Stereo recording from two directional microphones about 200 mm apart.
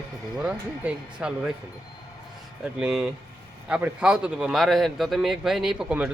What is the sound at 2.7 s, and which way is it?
A man's voice, 5° right (ahead or behind).